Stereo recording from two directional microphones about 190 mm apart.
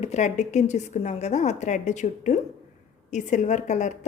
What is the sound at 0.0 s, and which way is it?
A woman's voice, 35° left (ahead or behind).